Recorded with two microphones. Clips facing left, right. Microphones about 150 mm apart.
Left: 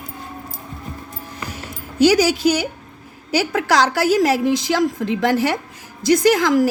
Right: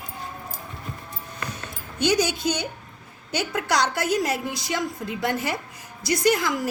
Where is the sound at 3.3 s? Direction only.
90° left.